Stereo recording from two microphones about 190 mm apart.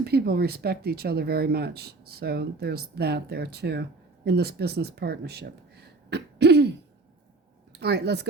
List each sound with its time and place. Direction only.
0.0 s a woman's voice: 55° right (ahead or behind)